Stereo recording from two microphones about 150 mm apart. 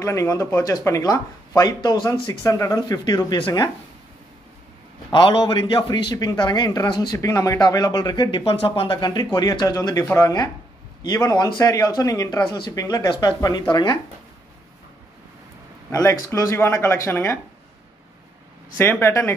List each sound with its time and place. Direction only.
0.0 s a man's voice: 20° left (ahead or behind)
5.1 s a man's voice: 30° left (ahead or behind)
15.9 s speech: 20° left (ahead or behind)
18.8 s speech: 15° left (ahead or behind)